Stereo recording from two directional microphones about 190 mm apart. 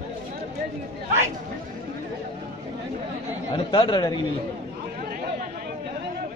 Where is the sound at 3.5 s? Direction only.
25° left (ahead or behind).